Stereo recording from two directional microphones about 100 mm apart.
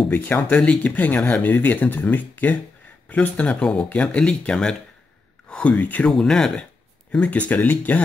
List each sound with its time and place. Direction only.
0.1 s speech: 15° left (ahead or behind)
6.1 s speech: 5° left (ahead or behind)